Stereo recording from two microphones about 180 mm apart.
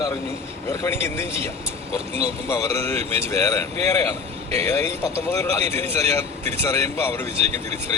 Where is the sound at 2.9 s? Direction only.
35° right (ahead or behind).